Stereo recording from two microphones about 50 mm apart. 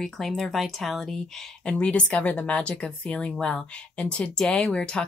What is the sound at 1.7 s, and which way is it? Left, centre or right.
Speech, left.